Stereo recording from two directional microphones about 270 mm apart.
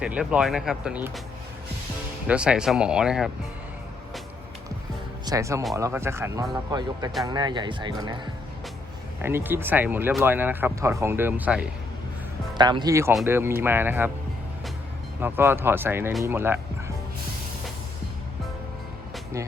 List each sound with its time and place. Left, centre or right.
0.0 s speech: centre
2.2 s speech: centre
5.2 s speech: centre
12.5 s speech: centre
15.2 s speech: centre